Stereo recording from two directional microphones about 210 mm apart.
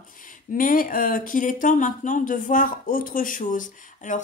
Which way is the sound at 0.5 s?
40° left (ahead or behind).